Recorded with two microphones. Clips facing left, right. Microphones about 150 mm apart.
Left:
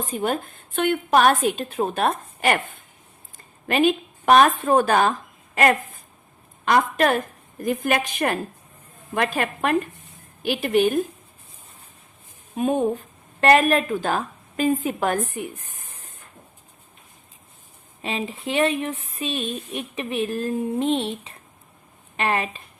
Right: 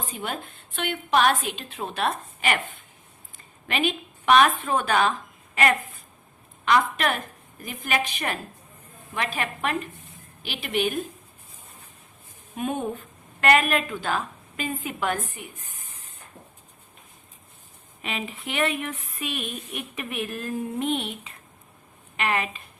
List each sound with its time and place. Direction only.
0.0 s a woman's voice: 45° left (ahead or behind)
6.7 s a woman's voice: 45° left (ahead or behind)
12.5 s a woman's voice: 35° left (ahead or behind); by 15.9 s 55° left (ahead or behind)
18.0 s a woman's voice: 30° left (ahead or behind)